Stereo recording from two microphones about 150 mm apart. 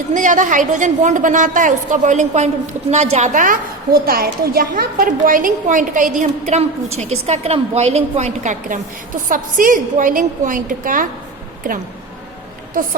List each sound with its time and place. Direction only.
0.1 s a woman's voice: 55° right (ahead or behind)